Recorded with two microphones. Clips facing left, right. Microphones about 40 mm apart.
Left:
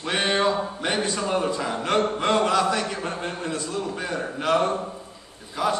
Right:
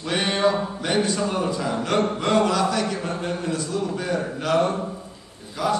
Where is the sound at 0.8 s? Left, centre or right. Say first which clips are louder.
Right 3 dB; left.